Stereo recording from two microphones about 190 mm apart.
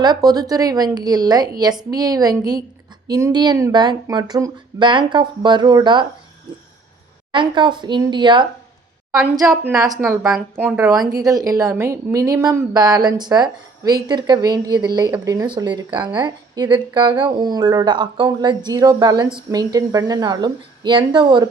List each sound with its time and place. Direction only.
0.0 s speech: 20° right (ahead or behind)
7.3 s speech: 25° right (ahead or behind)
9.7 s speech: 20° right (ahead or behind)